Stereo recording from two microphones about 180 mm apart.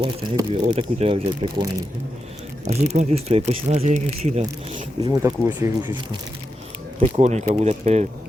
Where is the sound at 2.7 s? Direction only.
40° right (ahead or behind).